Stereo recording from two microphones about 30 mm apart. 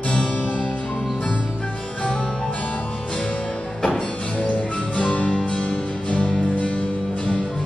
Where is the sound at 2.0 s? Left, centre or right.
Left.